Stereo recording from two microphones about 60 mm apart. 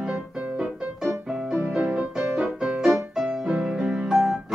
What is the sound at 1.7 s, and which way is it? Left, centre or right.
Music, centre.